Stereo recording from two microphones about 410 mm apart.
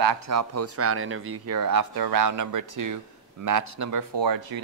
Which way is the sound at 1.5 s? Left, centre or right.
Right.